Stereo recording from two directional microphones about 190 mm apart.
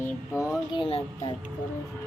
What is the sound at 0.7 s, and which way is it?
Speech, 30° left (ahead or behind).